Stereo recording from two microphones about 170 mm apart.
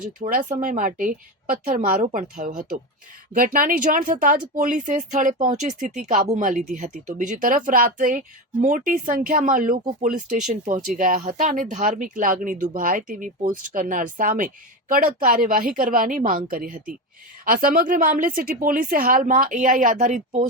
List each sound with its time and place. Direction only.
0.2 s a woman's voice: 50° right (ahead or behind)